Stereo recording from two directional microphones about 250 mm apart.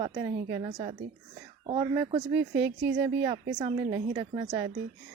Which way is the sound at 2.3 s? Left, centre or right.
Centre.